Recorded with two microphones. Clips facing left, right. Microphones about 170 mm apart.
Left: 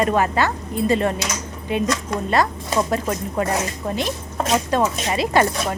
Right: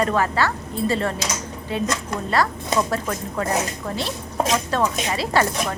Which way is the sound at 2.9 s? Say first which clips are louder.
Left 3 dB; 20° left (ahead or behind).